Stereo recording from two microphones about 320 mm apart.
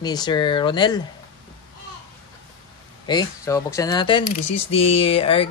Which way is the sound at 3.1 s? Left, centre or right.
Centre.